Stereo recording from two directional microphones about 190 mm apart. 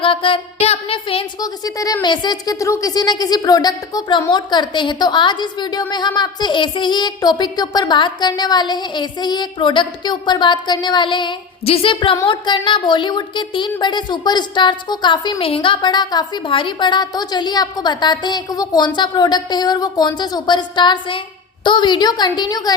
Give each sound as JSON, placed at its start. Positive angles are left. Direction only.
{"t": 0.0, "sound": "a woman's voice", "side_deg": 30}